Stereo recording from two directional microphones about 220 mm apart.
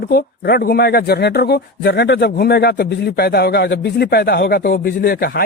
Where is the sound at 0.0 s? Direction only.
45° left (ahead or behind).